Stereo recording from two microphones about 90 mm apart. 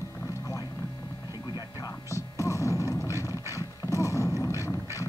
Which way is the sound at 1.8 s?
35° left (ahead or behind).